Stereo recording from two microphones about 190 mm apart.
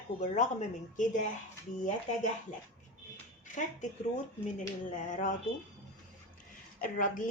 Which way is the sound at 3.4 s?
40° left (ahead or behind).